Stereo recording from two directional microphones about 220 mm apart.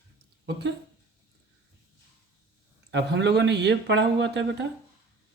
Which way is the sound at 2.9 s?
50° right (ahead or behind).